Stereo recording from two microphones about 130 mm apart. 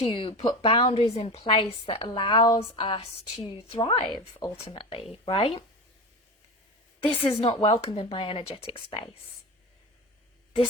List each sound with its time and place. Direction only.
0.0 s a woman's voice: 45° left (ahead or behind)
7.2 s speech: 45° left (ahead or behind)